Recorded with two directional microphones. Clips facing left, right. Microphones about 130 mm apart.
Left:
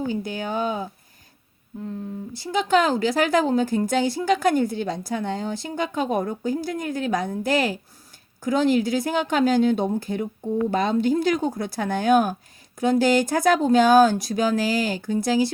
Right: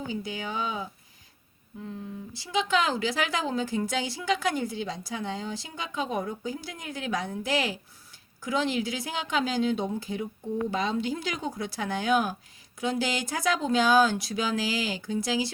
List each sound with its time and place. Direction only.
0.1 s speech: 50° left (ahead or behind)
2.3 s speech: 50° left (ahead or behind)